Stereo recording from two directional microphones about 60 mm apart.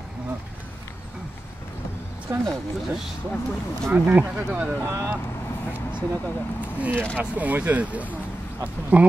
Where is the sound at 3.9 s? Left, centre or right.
Right.